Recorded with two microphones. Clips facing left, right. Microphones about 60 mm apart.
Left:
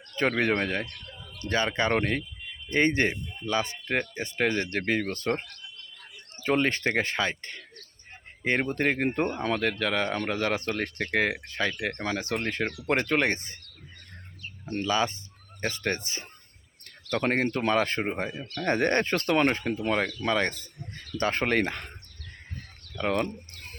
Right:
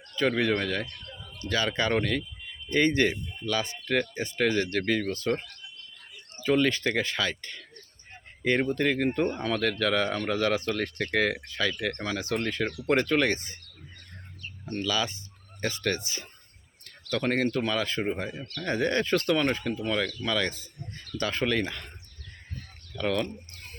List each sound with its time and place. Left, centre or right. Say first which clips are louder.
0.2 s speech: even; left
5.0 s speech: right 1 dB; left
8.6 s speech: right 1 dB; left; by 10.1 s centre
10.1 s speech: right 1 dB; left
11.4 s speech: even; left
11.7 s speech: right 1 dB; centre
12.5 s speech: even; left
12.7 s speech: right 4 dB; centre
13.1 s speech: even; left
14.8 s speech: left 3 dB; left
18.5 s speech: left 2 dB; left
23.0 s speech: left 1 dB; left